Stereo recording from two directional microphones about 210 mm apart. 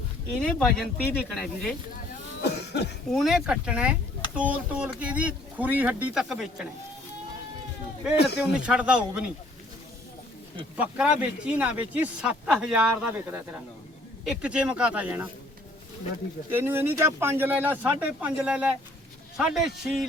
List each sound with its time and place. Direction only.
0.4 s speech: 5° left (ahead or behind)
2.4 s cough: 55° left (ahead or behind)
3.2 s speech: centre (ahead or behind)
8.1 s speech: 50° left (ahead or behind)
8.4 s speech: 5° right (ahead or behind)
10.8 s speech: 5° right (ahead or behind)
16.5 s speech: 10° right (ahead or behind)